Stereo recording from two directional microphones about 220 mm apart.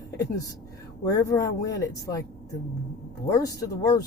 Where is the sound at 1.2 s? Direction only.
15° left (ahead or behind).